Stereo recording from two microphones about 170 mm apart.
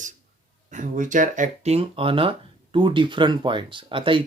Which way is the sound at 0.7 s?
50° right (ahead or behind).